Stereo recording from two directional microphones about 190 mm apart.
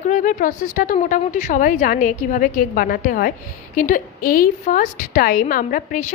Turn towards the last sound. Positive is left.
turn(degrees=45)  # may be behind; listen again after turning